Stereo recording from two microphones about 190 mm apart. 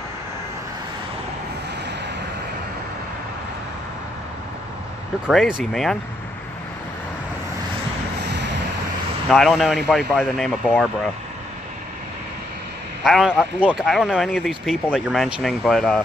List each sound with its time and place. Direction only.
5.3 s speech: centre (ahead or behind)
9.3 s speech: centre (ahead or behind)
13.0 s speech: centre (ahead or behind)